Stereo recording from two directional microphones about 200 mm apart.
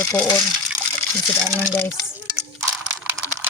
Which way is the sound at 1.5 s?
10° left (ahead or behind).